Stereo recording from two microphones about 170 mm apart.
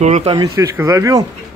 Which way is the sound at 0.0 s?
40° right (ahead or behind).